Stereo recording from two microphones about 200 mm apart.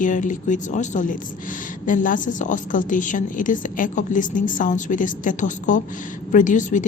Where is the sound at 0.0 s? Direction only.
40° left (ahead or behind).